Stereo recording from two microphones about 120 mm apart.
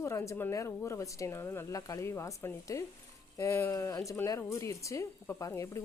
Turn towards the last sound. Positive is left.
turn(degrees=25)  # may be behind; listen again after turning